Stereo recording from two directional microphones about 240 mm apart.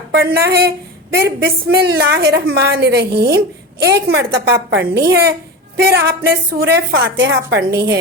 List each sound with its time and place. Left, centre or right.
0.1 s a woman's voice: right